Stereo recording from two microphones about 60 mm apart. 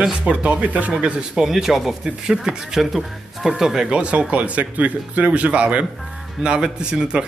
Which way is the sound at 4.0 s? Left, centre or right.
Centre.